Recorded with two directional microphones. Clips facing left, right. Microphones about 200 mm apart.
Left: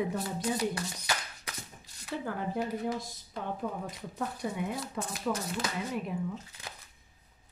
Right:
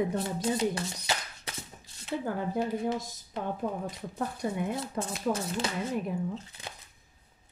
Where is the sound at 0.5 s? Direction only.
25° right (ahead or behind).